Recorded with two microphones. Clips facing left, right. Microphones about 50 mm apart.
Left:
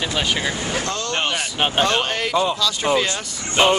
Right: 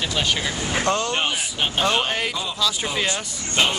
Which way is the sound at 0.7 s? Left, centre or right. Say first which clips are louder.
Right 3 dB; right.